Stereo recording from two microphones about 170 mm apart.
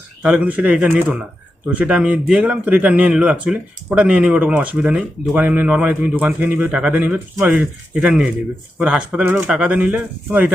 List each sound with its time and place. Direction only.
0.2 s speech: 5° right (ahead or behind)